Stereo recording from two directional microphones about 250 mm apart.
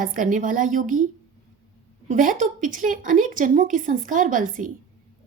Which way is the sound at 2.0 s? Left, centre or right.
Right.